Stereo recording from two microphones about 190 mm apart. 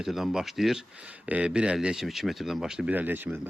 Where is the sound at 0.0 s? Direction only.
Centre (ahead or behind).